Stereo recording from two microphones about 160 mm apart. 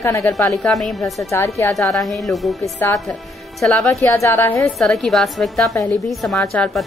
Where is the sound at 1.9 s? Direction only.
Centre (ahead or behind).